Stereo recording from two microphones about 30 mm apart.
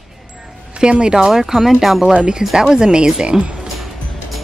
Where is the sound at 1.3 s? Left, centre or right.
Centre.